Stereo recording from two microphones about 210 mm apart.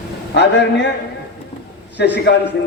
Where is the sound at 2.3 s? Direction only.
55° left (ahead or behind).